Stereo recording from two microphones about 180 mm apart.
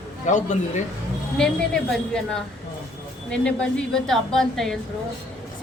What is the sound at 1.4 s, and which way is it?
Speech, 5° left (ahead or behind).